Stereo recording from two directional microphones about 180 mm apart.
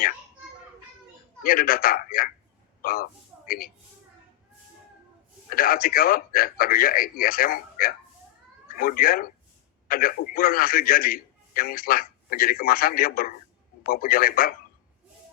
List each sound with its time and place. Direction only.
1.5 s a man's voice: 55° left (ahead or behind)
5.5 s a man's voice: 55° left (ahead or behind)